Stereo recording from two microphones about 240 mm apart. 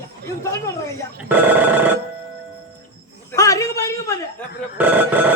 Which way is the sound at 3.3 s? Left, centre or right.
Centre.